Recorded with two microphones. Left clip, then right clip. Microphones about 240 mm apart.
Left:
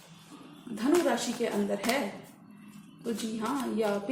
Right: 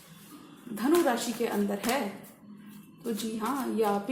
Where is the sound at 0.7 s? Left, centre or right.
Right.